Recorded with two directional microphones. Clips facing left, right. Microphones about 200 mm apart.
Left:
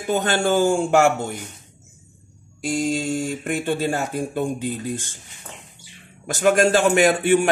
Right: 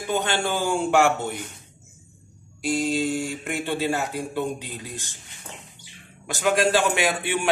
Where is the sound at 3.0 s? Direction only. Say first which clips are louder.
Left 2 dB; 50° left (ahead or behind).